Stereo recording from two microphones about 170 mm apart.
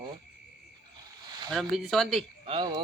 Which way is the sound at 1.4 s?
Centre (ahead or behind).